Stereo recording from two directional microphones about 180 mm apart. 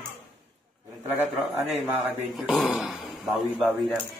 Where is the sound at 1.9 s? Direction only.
5° right (ahead or behind).